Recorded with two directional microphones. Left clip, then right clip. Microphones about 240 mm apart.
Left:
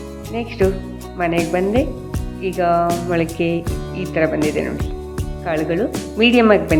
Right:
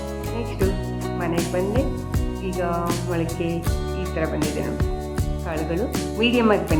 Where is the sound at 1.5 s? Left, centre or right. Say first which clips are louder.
Left 5 dB; centre.